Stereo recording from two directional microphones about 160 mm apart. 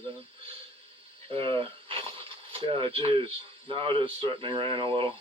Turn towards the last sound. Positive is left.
turn(degrees=-35)  # may be behind; listen again after turning